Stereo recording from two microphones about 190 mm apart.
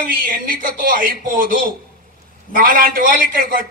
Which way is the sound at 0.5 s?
45° right (ahead or behind).